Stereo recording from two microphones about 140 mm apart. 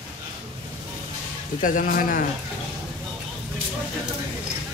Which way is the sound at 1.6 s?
75° left (ahead or behind).